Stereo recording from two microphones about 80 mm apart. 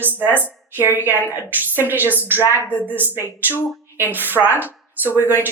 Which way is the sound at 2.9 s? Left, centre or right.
Right.